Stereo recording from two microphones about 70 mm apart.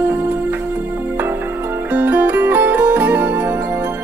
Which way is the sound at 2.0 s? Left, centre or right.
Right.